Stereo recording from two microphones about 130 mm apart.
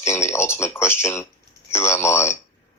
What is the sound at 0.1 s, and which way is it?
Speech, 20° left (ahead or behind).